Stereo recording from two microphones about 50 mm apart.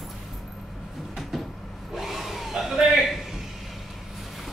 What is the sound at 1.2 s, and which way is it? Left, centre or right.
Cupboard open or close, centre.